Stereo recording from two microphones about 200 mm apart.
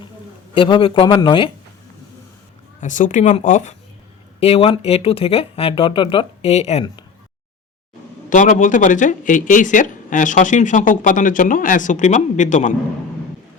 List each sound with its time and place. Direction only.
0.5 s speech: 25° left (ahead or behind)
2.8 s speech: 40° left (ahead or behind)
8.3 s speech: 40° left (ahead or behind)